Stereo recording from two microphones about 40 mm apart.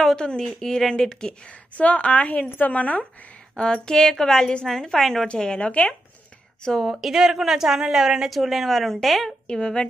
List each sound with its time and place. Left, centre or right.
0.0 s a woman's voice: centre
1.5 s a woman's voice: left
3.5 s a woman's voice: left
4.6 s a woman's voice: centre
5.3 s a woman's voice: left
6.8 s a woman's voice: centre
8.6 s speech: centre
9.5 s a woman's voice: left